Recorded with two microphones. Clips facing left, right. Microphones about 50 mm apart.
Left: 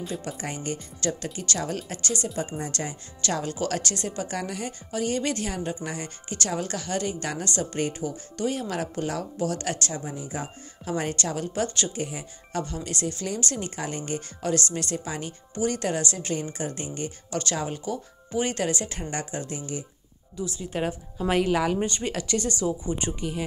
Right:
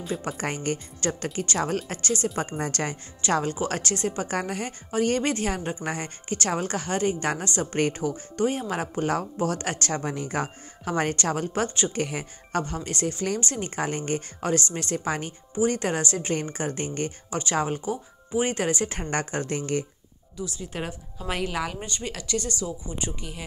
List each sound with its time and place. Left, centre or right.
0.4 s speech: right
3.2 s speech: right
7.8 s speech: right
8.4 s speech: right
10.0 s speech: right
11.9 s speech: right
15.5 s speech: right
17.3 s speech: right
17.6 s speech: right
20.3 s speech: left
21.8 s speech: left